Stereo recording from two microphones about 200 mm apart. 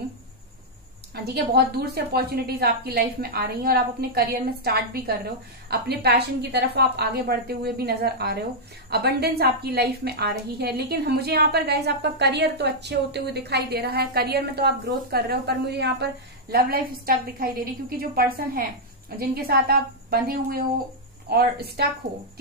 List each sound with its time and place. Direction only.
1.1 s a woman's voice: 55° right (ahead or behind)